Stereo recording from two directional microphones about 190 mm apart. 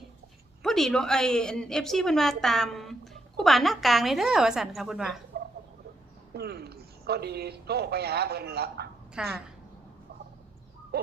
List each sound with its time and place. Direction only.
0.6 s a woman's voice: centre (ahead or behind)
5.3 s chicken: 55° right (ahead or behind)
6.3 s speech: 55° right (ahead or behind)
9.2 s a woman's voice: 5° right (ahead or behind)
10.9 s a sound: 55° right (ahead or behind)